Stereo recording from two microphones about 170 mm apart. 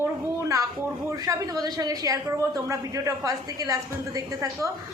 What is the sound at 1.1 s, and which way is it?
A woman's voice, 20° right (ahead or behind).